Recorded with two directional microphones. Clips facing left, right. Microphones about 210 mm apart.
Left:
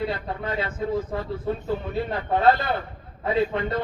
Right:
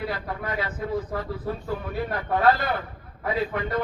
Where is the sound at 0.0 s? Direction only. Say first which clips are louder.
Left 2 dB; 25° left (ahead or behind).